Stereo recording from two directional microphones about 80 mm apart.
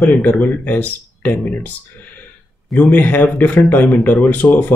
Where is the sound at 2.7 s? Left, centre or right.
Centre.